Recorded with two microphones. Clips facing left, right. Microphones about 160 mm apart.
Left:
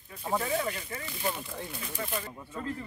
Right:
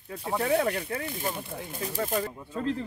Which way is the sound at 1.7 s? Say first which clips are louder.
Right 10 dB; 45° right (ahead or behind).